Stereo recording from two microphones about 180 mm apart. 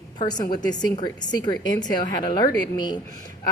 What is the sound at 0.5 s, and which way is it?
A woman's voice, 20° left (ahead or behind).